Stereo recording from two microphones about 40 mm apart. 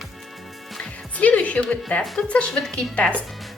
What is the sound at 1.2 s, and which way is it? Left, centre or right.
A woman's voice, left.